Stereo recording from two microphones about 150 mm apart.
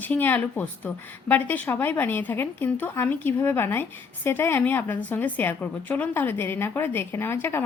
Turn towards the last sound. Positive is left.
turn(degrees=15)  # may be behind; listen again after turning